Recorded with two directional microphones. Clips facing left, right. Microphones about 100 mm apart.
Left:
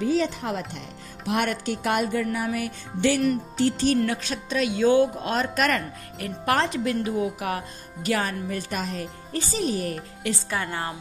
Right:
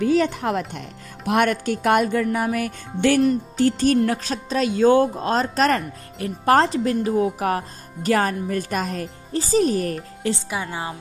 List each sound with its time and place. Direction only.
0.0 s speech: 60° right (ahead or behind)
9.3 s speech: 35° right (ahead or behind)
10.5 s a woman's voice: 15° right (ahead or behind)